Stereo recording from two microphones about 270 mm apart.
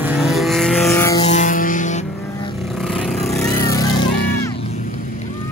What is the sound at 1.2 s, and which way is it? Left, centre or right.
Vehicle, left.